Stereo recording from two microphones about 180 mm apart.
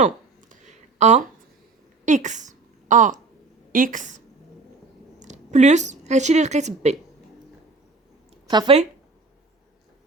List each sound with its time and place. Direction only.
0.0 s a sound: 40° right (ahead or behind)
2.0 s a woman's voice: 45° right (ahead or behind)
5.2 s a woman's voice: 40° right (ahead or behind)
8.4 s speech: 25° right (ahead or behind)